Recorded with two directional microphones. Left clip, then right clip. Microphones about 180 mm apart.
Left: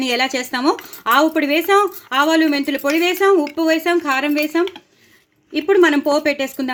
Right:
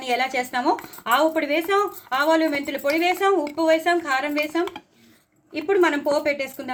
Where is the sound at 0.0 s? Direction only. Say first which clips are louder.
Left 4 dB; 55° left (ahead or behind).